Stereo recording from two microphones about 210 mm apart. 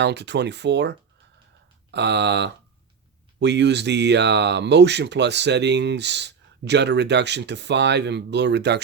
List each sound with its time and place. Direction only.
0.0 s speech: 55° right (ahead or behind)